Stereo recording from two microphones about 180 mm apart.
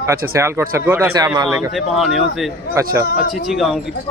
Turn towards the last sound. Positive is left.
turn(degrees=0)  # may be behind; listen again after turning